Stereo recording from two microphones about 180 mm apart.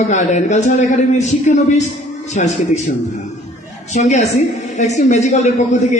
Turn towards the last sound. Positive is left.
turn(degrees=40)  # may be behind; listen again after turning